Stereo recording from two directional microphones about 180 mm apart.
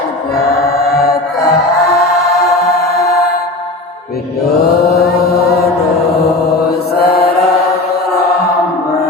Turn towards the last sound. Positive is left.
turn(degrees=60)  # may be behind; listen again after turning